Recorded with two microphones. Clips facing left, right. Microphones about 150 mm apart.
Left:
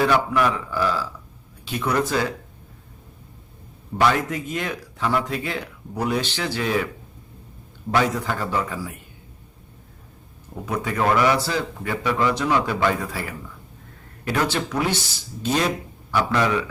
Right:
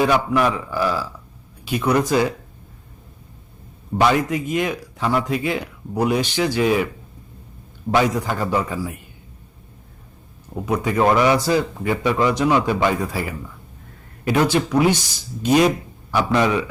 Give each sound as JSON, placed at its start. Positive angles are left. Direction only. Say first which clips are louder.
{"t": 0.0, "sound": "speech", "louder": "right 2 dB", "side_deg": -15}
{"t": 3.9, "sound": "speech", "louder": "right 3 dB", "side_deg": -15}
{"t": 7.9, "sound": "speech", "louder": "right 3 dB", "side_deg": -15}
{"t": 10.7, "sound": "speech", "louder": "right 4 dB", "side_deg": -20}